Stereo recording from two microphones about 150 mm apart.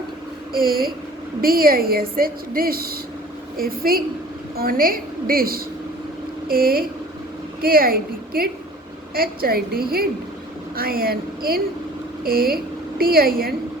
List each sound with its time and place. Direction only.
0.5 s a woman's voice: 80° right